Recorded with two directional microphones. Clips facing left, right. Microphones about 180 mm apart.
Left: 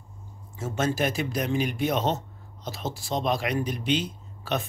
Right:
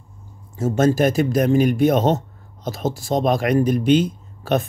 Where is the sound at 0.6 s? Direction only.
40° right (ahead or behind).